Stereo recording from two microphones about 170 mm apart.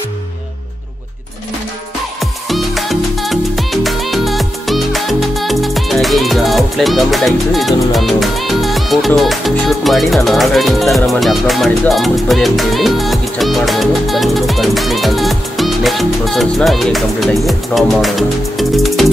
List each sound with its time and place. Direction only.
2.1 s music: centre (ahead or behind)